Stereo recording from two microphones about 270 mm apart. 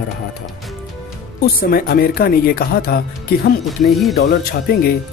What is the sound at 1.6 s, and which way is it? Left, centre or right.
Speech, left.